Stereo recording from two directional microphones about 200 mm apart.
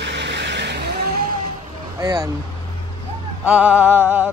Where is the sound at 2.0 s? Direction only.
20° right (ahead or behind).